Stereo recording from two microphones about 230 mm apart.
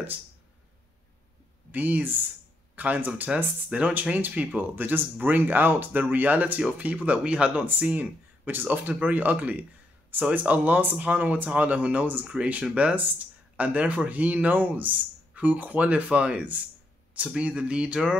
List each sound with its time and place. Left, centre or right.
1.7 s speech: centre